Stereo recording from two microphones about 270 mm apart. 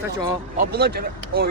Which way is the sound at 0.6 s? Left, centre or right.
Right.